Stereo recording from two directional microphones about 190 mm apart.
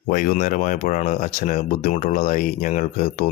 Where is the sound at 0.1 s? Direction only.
45° left (ahead or behind).